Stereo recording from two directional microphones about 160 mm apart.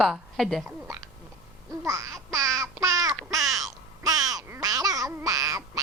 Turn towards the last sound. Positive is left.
turn(degrees=-20)  # may be behind; listen again after turning